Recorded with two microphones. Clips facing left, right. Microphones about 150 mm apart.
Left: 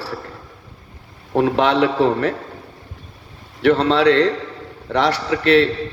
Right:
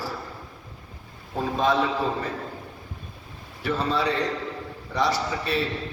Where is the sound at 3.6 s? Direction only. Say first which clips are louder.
Left 11 dB; 70° left (ahead or behind).